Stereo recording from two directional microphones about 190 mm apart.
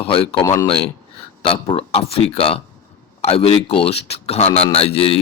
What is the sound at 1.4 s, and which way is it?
Speech, 30° left (ahead or behind).